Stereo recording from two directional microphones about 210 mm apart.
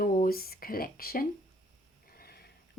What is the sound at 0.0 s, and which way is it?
Speech, 40° left (ahead or behind).